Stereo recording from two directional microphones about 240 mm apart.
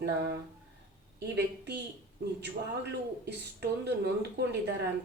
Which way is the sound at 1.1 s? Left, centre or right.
Right.